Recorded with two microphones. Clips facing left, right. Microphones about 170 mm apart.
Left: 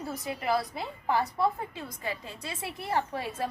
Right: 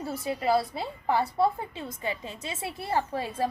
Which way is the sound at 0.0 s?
25° right (ahead or behind).